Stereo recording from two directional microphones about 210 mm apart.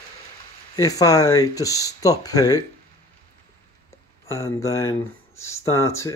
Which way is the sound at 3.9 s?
15° left (ahead or behind).